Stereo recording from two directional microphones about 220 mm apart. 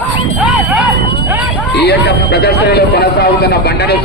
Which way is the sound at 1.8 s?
50° left (ahead or behind).